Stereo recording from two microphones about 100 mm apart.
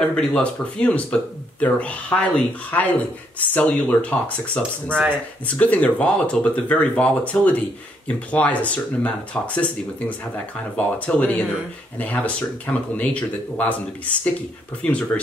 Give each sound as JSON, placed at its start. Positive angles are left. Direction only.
{"t": 0.0, "sound": "speech", "side_deg": 10}
{"t": 4.8, "sound": "speech", "side_deg": -15}
{"t": 5.6, "sound": "speech", "side_deg": 10}